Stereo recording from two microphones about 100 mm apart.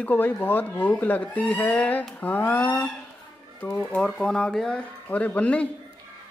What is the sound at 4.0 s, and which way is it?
Speech, 10° left (ahead or behind).